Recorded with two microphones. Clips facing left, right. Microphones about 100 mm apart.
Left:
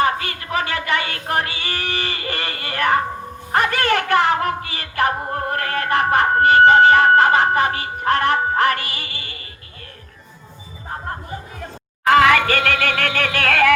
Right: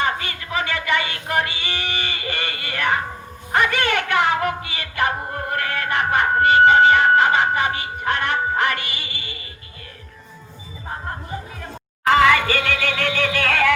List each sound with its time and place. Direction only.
0.0 s a sound: 45° left (ahead or behind)
3.5 s music: 40° left (ahead or behind)
12.1 s music: 60° left (ahead or behind)